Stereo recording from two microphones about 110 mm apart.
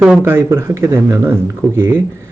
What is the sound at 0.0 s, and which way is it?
Speech, 10° right (ahead or behind).